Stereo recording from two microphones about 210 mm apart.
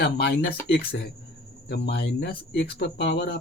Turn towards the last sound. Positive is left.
turn(degrees=50)  # may be behind; listen again after turning